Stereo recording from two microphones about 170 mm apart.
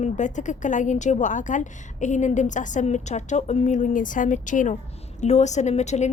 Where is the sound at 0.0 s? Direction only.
45° left (ahead or behind).